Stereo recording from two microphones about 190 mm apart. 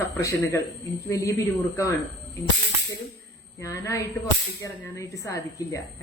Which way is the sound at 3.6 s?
15° left (ahead or behind).